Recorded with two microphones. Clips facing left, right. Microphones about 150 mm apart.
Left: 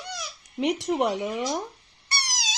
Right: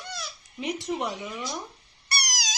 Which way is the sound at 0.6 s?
75° left (ahead or behind).